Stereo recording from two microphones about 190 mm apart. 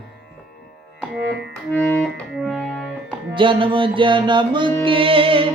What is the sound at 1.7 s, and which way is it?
Music, 5° left (ahead or behind).